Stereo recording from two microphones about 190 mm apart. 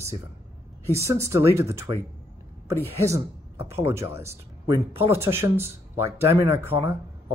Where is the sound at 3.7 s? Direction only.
15° right (ahead or behind).